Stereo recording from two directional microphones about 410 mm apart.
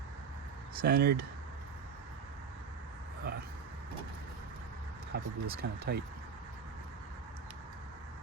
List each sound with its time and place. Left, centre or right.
0.8 s speech: right
5.1 s speech: right